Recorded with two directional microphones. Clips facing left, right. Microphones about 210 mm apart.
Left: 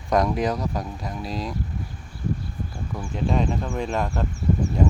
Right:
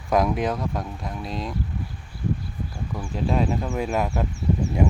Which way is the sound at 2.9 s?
Centre (ahead or behind).